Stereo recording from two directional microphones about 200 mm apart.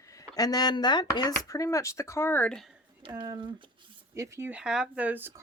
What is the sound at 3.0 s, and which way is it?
Speech, 20° right (ahead or behind).